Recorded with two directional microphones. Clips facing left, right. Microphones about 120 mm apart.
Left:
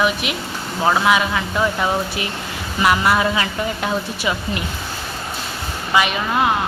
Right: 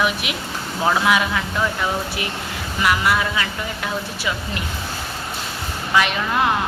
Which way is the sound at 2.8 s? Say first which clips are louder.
Left 3 dB; 25° left (ahead or behind).